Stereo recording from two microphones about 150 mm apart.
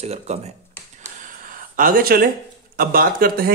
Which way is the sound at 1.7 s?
65° right (ahead or behind).